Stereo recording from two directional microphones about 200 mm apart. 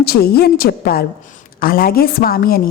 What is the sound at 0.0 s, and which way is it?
A woman's voice, 50° left (ahead or behind).